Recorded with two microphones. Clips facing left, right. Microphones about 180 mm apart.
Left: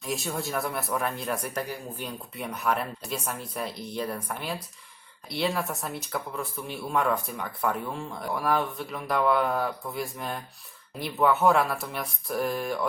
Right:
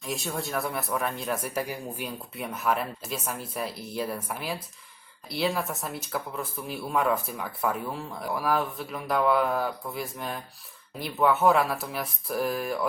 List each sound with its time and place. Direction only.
0.0 s speech: centre (ahead or behind)